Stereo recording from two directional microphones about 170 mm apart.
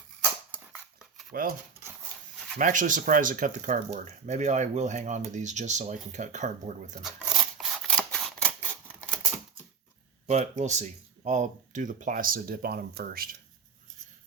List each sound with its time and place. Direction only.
1.3 s speech: 60° right (ahead or behind)
2.6 s speech: 50° right (ahead or behind)
7.0 s scissors: centre (ahead or behind)
10.2 s speech: 40° right (ahead or behind); by 13.2 s 65° right (ahead or behind)